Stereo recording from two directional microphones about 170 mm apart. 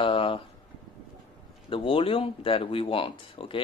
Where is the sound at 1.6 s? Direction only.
30° left (ahead or behind).